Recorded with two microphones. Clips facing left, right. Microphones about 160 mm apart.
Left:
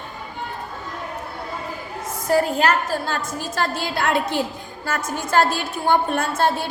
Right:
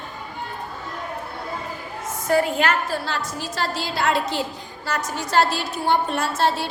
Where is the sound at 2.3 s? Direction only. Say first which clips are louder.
Left 1 dB; 35° left (ahead or behind).